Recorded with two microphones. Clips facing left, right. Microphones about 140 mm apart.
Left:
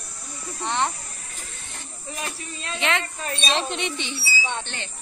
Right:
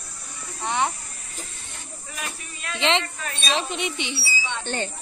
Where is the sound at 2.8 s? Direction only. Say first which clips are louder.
Right 3 dB; 25° right (ahead or behind).